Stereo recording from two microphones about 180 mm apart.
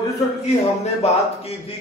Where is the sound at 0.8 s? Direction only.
35° left (ahead or behind).